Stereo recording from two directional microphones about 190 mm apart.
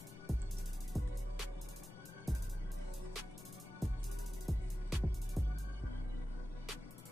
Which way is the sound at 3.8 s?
Centre (ahead or behind).